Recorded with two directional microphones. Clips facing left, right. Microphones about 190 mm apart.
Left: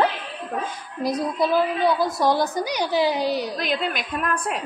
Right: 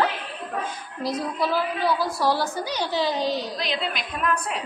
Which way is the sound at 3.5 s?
50° left (ahead or behind).